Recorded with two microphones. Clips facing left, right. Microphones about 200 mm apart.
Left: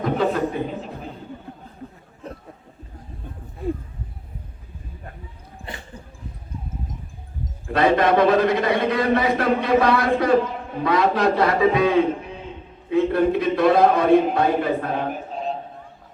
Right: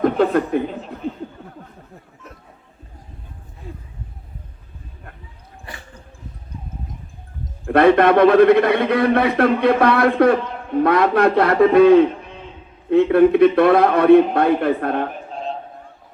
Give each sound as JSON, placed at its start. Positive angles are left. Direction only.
{"t": 0.0, "sound": "speech", "side_deg": -55}
{"t": 0.7, "sound": "chuckle", "side_deg": 0}
{"t": 7.6, "sound": "a man's voice", "side_deg": -60}